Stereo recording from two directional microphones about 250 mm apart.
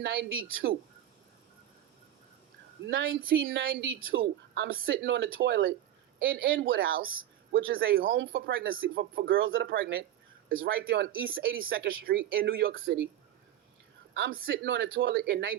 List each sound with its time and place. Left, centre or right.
0.0 s speech: right
2.8 s speech: right
3.4 s speech: right
7.7 s speech: right
9.3 s speech: right
9.6 s speech: right
11.4 s speech: right
11.7 s speech: right
12.0 s speech: right
14.1 s a man's voice: right